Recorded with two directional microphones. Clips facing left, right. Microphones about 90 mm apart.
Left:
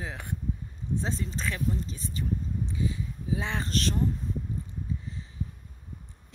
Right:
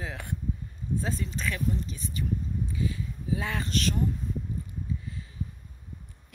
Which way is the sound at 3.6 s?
35° left (ahead or behind).